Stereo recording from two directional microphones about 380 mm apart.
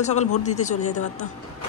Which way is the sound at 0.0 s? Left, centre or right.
Centre.